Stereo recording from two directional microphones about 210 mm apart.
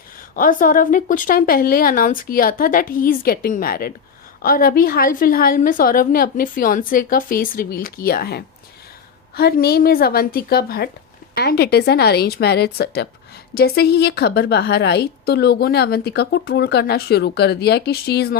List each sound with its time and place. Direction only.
0.3 s a woman's voice: 40° left (ahead or behind)